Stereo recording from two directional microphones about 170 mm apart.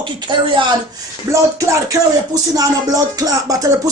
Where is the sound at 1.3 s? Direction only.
20° right (ahead or behind).